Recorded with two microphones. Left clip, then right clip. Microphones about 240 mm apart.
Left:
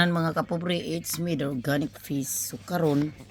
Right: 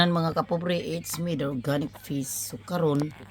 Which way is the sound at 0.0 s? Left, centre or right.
Centre.